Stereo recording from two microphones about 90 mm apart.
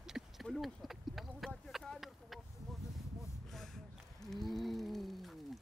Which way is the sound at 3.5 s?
5° left (ahead or behind).